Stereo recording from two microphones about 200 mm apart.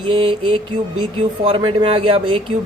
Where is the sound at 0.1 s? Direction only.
25° right (ahead or behind).